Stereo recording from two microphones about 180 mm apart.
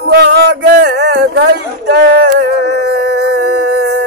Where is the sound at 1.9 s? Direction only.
70° right (ahead or behind).